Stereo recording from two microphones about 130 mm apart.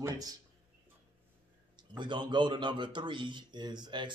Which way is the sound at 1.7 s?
35° right (ahead or behind).